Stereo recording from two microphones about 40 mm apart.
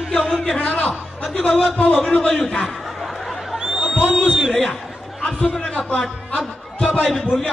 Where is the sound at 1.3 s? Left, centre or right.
Left.